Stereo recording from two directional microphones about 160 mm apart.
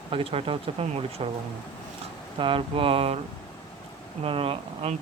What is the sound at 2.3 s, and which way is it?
Speech, 35° right (ahead or behind).